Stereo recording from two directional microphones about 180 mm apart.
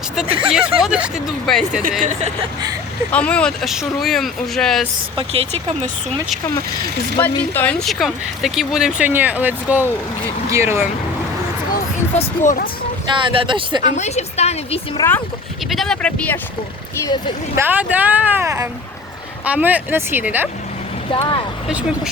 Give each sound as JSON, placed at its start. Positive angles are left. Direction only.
{"t": 0.4, "sound": "speech", "side_deg": -5}
{"t": 3.1, "sound": "speech", "side_deg": 5}
{"t": 5.1, "sound": "speech", "side_deg": -35}
{"t": 7.2, "sound": "speech", "side_deg": 10}
{"t": 12.1, "sound": "speech", "side_deg": 45}
{"t": 13.1, "sound": "speech", "side_deg": -25}
{"t": 13.8, "sound": "a woman's voice", "side_deg": 40}
{"t": 14.9, "sound": "speech", "side_deg": 15}
{"t": 15.7, "sound": "speech", "side_deg": 0}
{"t": 17.0, "sound": "speech", "side_deg": 20}
{"t": 17.6, "sound": "speech", "side_deg": -10}
{"t": 21.1, "sound": "speech", "side_deg": 30}
{"t": 21.7, "sound": "speech", "side_deg": -5}